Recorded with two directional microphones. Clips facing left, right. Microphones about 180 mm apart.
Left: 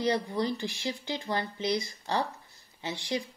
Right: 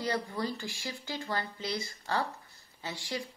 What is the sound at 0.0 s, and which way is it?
Speech, 20° left (ahead or behind).